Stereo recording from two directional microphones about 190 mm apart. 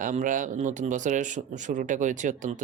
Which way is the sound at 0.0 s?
45° right (ahead or behind).